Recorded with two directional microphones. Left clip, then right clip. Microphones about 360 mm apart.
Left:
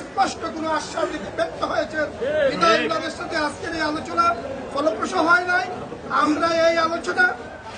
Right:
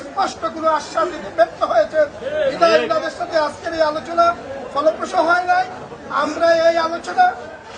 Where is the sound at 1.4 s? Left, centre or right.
Centre.